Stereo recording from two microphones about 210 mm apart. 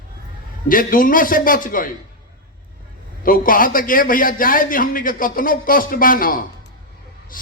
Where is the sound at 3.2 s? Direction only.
40° left (ahead or behind).